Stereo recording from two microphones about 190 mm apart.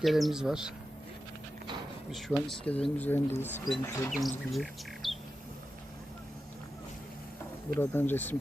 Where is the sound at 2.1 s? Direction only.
Centre (ahead or behind).